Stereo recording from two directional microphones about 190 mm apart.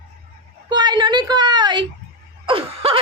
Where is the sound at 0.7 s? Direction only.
20° right (ahead or behind).